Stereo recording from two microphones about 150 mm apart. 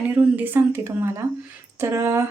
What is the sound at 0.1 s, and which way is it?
A woman's voice, 10° right (ahead or behind).